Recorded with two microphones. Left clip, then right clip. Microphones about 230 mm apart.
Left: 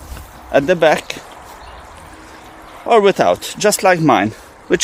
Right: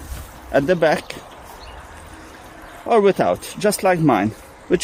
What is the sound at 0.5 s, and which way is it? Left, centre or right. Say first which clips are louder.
Speech: left 4 dB; left.